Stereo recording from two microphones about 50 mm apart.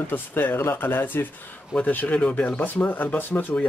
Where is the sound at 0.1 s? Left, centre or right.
Left.